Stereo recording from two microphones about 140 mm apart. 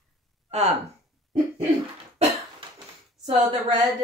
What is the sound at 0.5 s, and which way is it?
Speech, 50° right (ahead or behind).